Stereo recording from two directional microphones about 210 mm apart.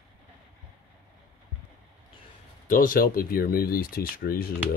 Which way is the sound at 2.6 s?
40° left (ahead or behind).